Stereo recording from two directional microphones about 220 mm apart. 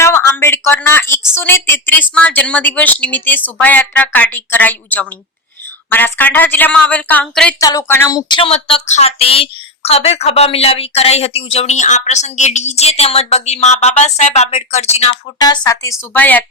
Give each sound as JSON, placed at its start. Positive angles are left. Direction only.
{"t": 0.0, "sound": "a sound", "side_deg": 10}
{"t": 1.4, "sound": "a woman's voice", "side_deg": 10}
{"t": 15.4, "sound": "a woman's voice", "side_deg": 15}